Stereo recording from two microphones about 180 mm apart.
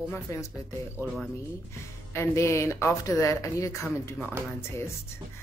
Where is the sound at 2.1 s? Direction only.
15° left (ahead or behind).